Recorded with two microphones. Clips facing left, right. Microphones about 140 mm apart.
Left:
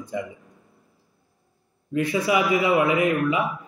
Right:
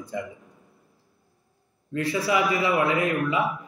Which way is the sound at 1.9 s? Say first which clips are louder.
Left 2 dB; 15° left (ahead or behind).